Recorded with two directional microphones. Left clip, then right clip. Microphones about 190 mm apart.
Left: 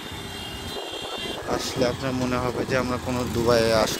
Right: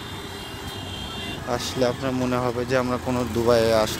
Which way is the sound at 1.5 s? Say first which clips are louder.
Right 1 dB; 20° right (ahead or behind).